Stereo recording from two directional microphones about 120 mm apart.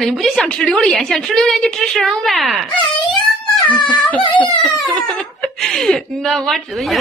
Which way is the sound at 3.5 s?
Centre (ahead or behind).